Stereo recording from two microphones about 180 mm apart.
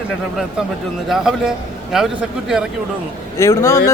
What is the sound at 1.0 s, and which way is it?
A man's voice, centre (ahead or behind).